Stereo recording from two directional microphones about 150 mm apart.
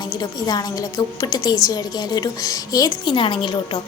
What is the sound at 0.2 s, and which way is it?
A woman's voice, 25° left (ahead or behind).